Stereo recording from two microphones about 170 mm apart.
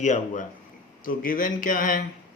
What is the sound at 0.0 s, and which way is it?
Speech, 45° left (ahead or behind).